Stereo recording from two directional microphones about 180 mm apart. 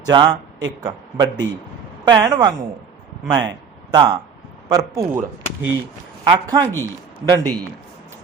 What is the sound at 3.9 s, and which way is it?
Speech, 25° right (ahead or behind).